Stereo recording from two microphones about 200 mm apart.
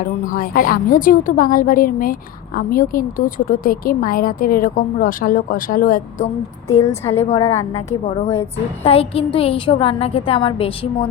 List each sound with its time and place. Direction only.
0.0 s speech: 40° left (ahead or behind)
6.8 s a woman's voice: 10° left (ahead or behind)
7.2 s a woman's voice: 35° left (ahead or behind)
7.4 s a woman's voice: 15° left (ahead or behind)
7.9 s a woman's voice: 35° left (ahead or behind)